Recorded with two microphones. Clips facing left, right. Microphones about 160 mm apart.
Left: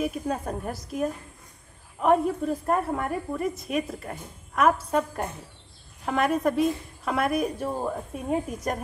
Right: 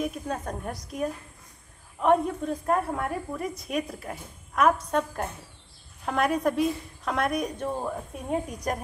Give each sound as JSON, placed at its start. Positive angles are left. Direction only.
{"t": 0.0, "sound": "a woman's voice", "side_deg": 5}